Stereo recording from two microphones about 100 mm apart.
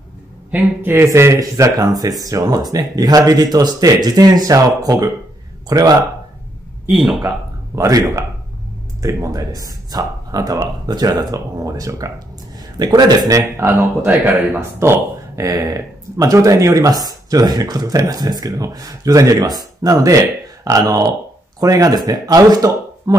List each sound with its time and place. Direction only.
0.5 s speech: 20° right (ahead or behind); by 5.9 s 40° right (ahead or behind)
6.9 s speech: centre (ahead or behind)
7.2 s speech: 35° right (ahead or behind)
13.6 s speech: 25° right (ahead or behind)